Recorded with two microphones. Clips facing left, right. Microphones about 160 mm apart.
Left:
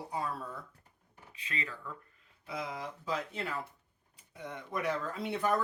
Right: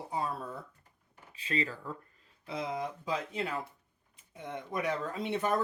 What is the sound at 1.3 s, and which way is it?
Speech, 30° right (ahead or behind).